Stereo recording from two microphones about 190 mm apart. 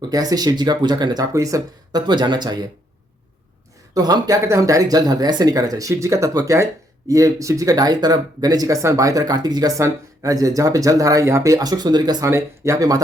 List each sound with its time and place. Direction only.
0.1 s speech: 20° right (ahead or behind)
3.9 s speech: 20° right (ahead or behind)